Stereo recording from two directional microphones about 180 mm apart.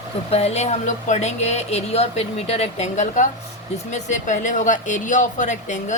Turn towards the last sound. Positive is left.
turn(degrees=45)  # may be behind; listen again after turning